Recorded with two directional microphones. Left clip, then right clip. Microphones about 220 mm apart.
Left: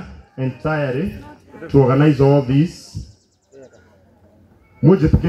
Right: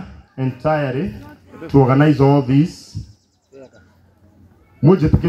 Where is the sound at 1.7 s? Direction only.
20° right (ahead or behind).